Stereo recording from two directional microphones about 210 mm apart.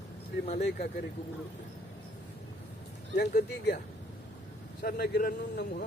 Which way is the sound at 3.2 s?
50° left (ahead or behind).